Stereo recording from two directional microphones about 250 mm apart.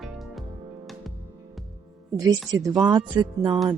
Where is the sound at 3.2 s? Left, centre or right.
Centre.